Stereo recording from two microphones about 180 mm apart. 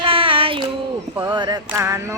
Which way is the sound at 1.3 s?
25° right (ahead or behind).